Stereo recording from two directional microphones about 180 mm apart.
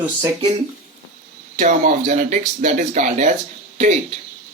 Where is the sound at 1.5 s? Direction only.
45° right (ahead or behind).